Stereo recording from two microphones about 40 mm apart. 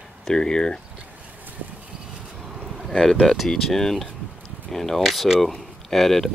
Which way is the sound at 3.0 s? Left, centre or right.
Centre.